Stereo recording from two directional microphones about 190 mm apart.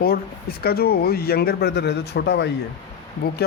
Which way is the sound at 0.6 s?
55° left (ahead or behind).